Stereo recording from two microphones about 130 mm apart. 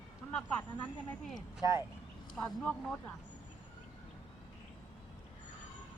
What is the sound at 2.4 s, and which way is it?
Speech, 5° left (ahead or behind).